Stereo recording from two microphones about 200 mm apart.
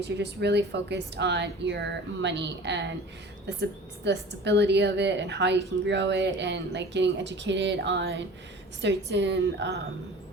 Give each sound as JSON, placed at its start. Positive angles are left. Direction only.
{"t": 0.0, "sound": "speech", "side_deg": -60}